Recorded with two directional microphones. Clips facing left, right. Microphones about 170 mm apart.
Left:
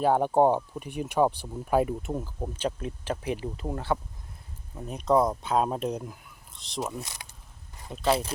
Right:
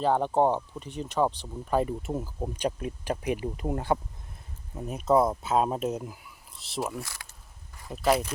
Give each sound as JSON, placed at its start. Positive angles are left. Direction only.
{"t": 0.0, "sound": "speech", "side_deg": 10}
{"t": 7.0, "sound": "speech", "side_deg": 20}
{"t": 7.9, "sound": "speech", "side_deg": -5}